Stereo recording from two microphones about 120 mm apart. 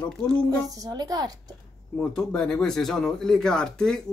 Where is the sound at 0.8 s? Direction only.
35° right (ahead or behind).